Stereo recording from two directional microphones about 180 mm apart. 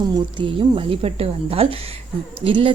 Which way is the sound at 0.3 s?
30° right (ahead or behind).